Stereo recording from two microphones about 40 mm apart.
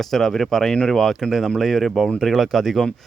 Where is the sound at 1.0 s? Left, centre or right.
Centre.